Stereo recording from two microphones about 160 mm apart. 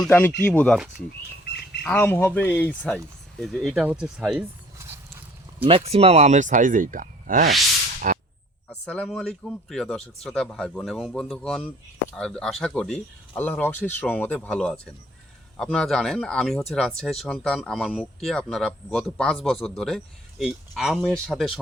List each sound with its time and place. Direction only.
0.0 s speech: 15° left (ahead or behind)
1.5 s squawk: 90° left
1.8 s speech: 10° left (ahead or behind)
4.8 s a sound: 15° right (ahead or behind)
5.6 s speech: 35° right (ahead or behind); by 7.5 s 55° right (ahead or behind)
8.1 s whip: 60° right (ahead or behind)
8.7 s speech: 5° left (ahead or behind)